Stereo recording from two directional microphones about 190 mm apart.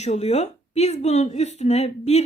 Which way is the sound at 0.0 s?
35° left (ahead or behind).